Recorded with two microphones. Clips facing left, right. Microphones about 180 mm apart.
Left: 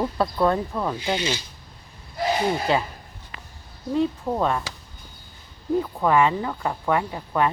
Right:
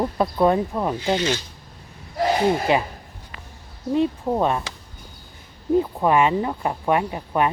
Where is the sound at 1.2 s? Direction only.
10° left (ahead or behind).